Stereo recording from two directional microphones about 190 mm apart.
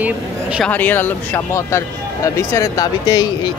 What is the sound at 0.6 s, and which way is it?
Speech, 10° left (ahead or behind).